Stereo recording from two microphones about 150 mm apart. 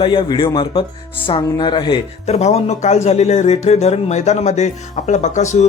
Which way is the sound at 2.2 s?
45° left (ahead or behind).